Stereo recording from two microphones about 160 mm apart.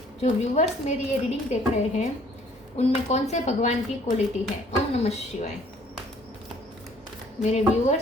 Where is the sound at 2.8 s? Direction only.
45° left (ahead or behind).